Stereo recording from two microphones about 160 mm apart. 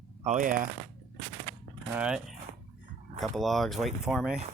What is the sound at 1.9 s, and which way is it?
Speech, 5° right (ahead or behind).